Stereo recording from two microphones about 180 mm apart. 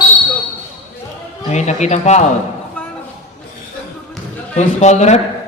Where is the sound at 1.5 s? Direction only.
40° left (ahead or behind).